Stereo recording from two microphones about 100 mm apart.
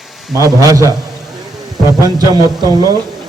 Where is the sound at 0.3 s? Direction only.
35° right (ahead or behind).